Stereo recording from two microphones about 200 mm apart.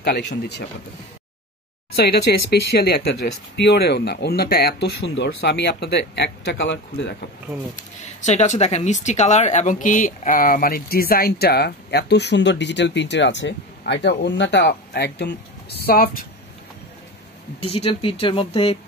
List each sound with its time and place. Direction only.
0.0 s speech: 55° left (ahead or behind)
2.3 s speech: 50° left (ahead or behind)
7.7 s speech: 35° left (ahead or behind)
17.6 s speech: 30° left (ahead or behind)